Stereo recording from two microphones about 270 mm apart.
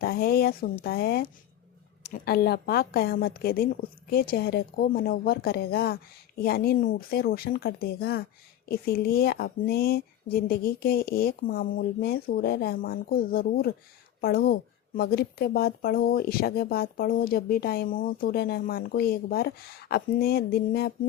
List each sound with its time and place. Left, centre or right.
0.0 s a woman's voice: left